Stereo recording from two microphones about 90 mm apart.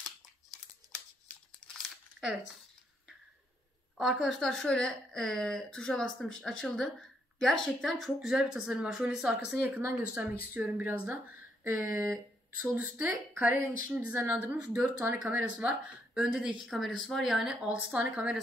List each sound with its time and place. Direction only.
4.0 s a woman's voice: centre (ahead or behind)
9.6 s speech: 25° right (ahead or behind)